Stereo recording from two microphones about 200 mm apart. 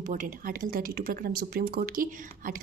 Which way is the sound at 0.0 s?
40° right (ahead or behind).